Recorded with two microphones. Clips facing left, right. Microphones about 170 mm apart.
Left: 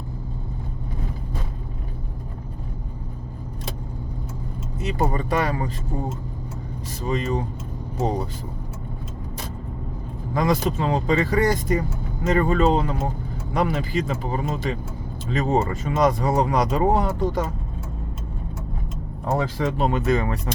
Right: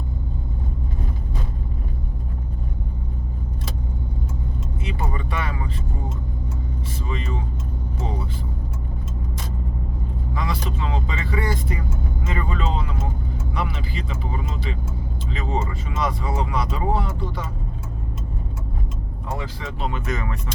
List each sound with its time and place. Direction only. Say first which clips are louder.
4.8 s speech: left 7 dB; 40° left (ahead or behind)
7.0 s speech: left 7 dB; 40° left (ahead or behind)
10.3 s speech: left 8 dB; 45° left (ahead or behind)
19.3 s speech: left 8 dB; 45° left (ahead or behind)
20.1 s speech: left 7 dB; 35° left (ahead or behind)